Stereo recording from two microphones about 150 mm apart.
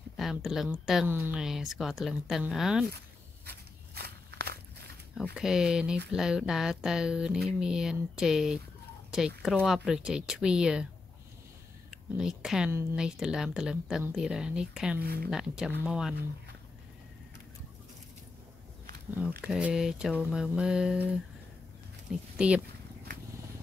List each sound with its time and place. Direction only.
0.2 s speech: centre (ahead or behind)
1.0 s speech: 15° right (ahead or behind)
1.4 s speech: centre (ahead or behind)
3.4 s walk: 90° right
5.3 s speech: 5° right (ahead or behind)
11.9 s speech: 5° right (ahead or behind)
19.4 s speech: 5° right (ahead or behind)
22.1 s speech: 5° right (ahead or behind)